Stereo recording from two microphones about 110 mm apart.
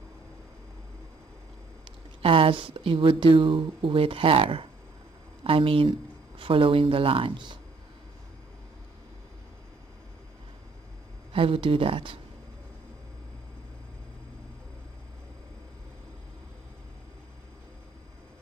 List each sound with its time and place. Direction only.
2.2 s speech: 55° right (ahead or behind)
11.3 s speech: 55° right (ahead or behind)